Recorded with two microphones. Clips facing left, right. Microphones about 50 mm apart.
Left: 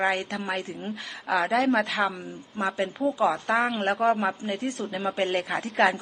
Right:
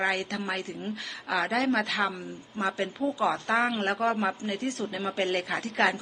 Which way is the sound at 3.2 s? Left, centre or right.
Centre.